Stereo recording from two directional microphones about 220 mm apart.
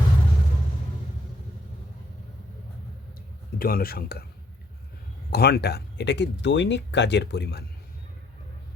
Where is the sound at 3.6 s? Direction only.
45° left (ahead or behind).